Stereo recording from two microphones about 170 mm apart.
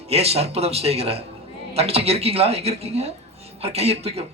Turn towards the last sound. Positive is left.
turn(degrees=-35)  # may be behind; listen again after turning